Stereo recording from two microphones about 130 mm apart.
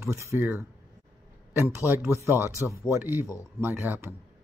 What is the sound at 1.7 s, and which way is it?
Speech, 20° right (ahead or behind).